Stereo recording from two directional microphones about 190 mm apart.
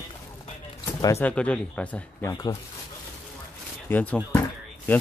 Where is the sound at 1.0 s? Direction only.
10° left (ahead or behind).